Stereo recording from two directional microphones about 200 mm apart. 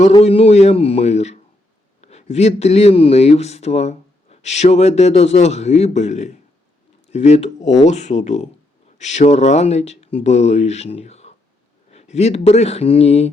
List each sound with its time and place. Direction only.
0.1 s speech: 30° left (ahead or behind)